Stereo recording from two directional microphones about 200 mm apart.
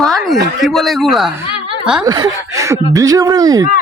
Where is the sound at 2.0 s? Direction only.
20° right (ahead or behind).